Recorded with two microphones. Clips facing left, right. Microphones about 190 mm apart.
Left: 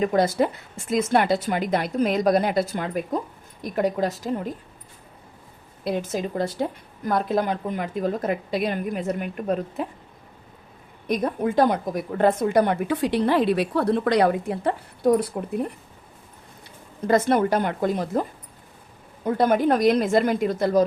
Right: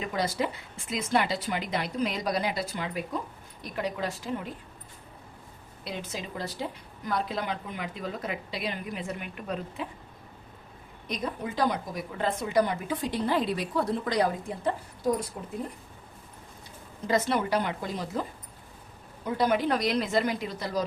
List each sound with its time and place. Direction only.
0.0 s a woman's voice: 50° left (ahead or behind)
5.8 s a woman's voice: 50° left (ahead or behind)
11.0 s a woman's voice: 55° left (ahead or behind)
17.1 s a woman's voice: 50° left (ahead or behind)